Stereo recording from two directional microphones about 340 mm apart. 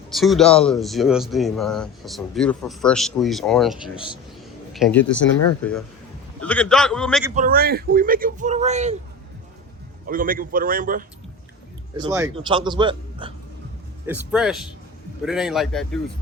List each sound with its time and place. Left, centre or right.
0.1 s speech: centre
6.4 s speech: centre
7.3 s speech: right
10.1 s speech: right
11.9 s a man's voice: centre
14.1 s speech: centre